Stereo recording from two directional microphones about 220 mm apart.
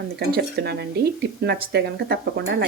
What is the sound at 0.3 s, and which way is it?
Speech, 45° right (ahead or behind).